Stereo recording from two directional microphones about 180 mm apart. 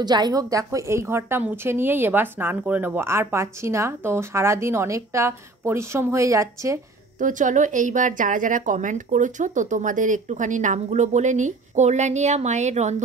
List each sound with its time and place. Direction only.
0.0 s a woman's voice: 25° right (ahead or behind)
7.2 s a woman's voice: 45° right (ahead or behind)